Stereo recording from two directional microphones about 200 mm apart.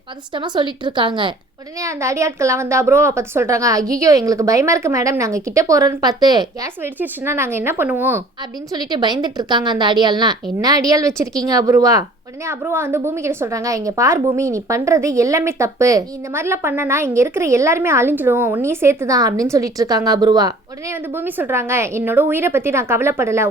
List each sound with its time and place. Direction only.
0.3 s a woman's voice: 20° right (ahead or behind)
8.7 s a woman's voice: 20° right (ahead or behind)